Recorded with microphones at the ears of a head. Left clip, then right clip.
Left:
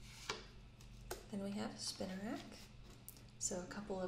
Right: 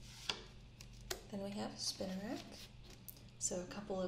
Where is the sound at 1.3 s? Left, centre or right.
Centre.